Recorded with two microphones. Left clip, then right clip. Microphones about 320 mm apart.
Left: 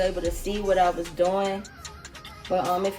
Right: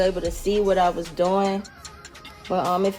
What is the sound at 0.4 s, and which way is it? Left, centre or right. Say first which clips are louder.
Speech: right 3 dB; right.